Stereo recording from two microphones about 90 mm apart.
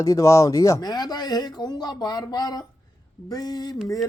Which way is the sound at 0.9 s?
50° left (ahead or behind).